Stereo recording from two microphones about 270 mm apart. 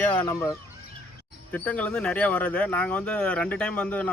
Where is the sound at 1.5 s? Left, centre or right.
Centre.